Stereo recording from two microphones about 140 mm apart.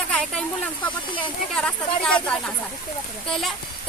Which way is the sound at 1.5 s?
5° left (ahead or behind).